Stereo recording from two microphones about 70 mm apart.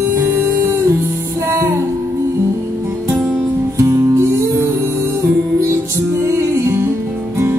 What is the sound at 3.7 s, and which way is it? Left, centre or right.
Music, right.